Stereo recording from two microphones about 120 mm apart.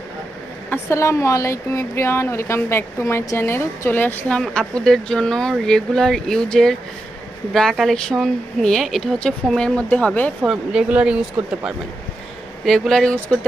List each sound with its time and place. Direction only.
0.7 s speech: 25° left (ahead or behind)
4.4 s speech: 5° left (ahead or behind)
10.4 s speech: 5° right (ahead or behind)
12.6 s speech: 5° left (ahead or behind)